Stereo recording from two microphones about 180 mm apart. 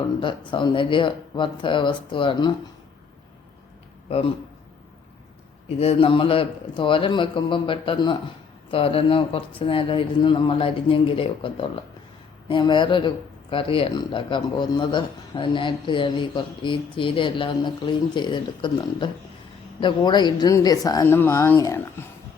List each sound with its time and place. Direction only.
0.2 s speech: 25° left (ahead or behind)
5.6 s speech: 35° left (ahead or behind); by 22.0 s 15° left (ahead or behind)